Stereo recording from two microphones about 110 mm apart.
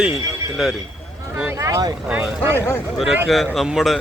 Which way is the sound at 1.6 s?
30° right (ahead or behind).